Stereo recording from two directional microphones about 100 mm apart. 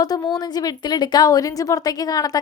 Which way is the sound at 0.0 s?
40° left (ahead or behind).